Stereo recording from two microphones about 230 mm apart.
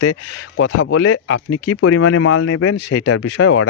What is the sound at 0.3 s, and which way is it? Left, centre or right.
Speech, left.